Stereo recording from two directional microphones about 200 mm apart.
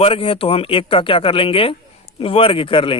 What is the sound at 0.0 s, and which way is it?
A man's voice, 30° left (ahead or behind).